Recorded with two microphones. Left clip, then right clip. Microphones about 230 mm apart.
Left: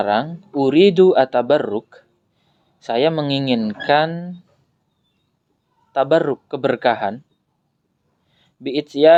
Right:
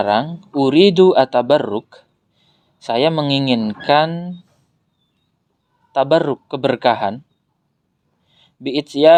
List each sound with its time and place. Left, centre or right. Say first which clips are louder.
0.0 s speech: right 2 dB; right
5.9 s speech: right 1 dB; right
8.3 s speech: right 2 dB; right